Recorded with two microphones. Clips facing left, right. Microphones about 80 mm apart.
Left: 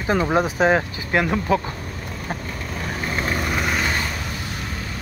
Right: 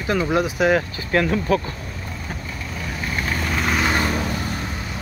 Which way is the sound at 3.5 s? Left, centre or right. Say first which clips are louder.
Right 1 dB; centre.